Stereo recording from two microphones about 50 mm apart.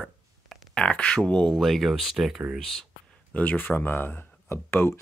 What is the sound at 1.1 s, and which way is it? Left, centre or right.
Speech, centre.